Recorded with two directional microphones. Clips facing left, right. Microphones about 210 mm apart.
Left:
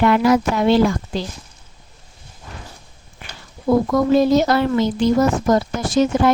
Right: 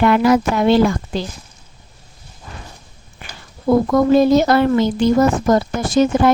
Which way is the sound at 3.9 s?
55° right (ahead or behind).